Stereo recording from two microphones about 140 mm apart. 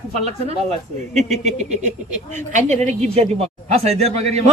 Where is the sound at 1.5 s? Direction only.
55° right (ahead or behind).